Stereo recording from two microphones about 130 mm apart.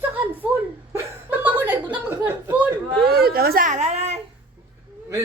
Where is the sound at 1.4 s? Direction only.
15° right (ahead or behind).